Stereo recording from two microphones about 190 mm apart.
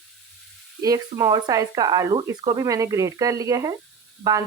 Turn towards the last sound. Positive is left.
turn(degrees=-20)  # may be behind; listen again after turning